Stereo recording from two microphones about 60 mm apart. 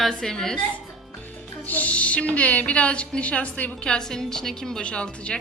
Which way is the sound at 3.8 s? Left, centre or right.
Centre.